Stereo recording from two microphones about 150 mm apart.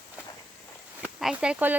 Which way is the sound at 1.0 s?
5° right (ahead or behind).